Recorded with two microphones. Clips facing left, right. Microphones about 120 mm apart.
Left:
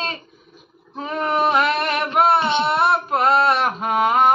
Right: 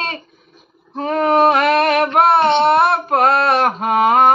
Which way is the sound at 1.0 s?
60° right (ahead or behind).